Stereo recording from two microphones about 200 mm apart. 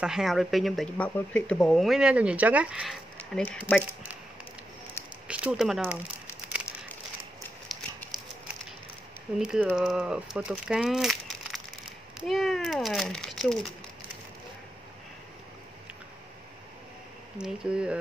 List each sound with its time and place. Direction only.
0.0 s speech: centre (ahead or behind)
5.3 s speech: 5° right (ahead or behind)
7.6 s a sound: centre (ahead or behind)
9.4 s speech: 5° right (ahead or behind)
17.4 s speech: 5° right (ahead or behind)